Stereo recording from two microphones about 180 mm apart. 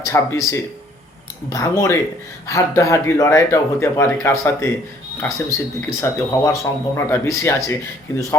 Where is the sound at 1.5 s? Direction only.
20° left (ahead or behind).